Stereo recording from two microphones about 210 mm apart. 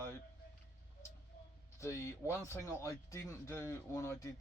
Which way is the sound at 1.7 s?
15° left (ahead or behind).